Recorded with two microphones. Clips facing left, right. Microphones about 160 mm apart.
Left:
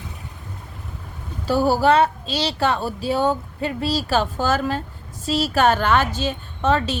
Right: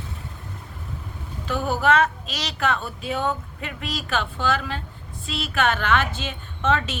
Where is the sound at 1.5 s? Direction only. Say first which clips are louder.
Left 5 dB; 35° left (ahead or behind).